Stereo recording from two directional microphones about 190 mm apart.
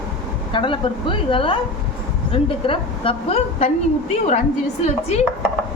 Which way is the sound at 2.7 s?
30° left (ahead or behind).